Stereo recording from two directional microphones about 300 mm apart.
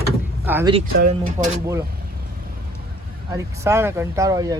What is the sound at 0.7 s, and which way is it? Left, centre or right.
Speech, right.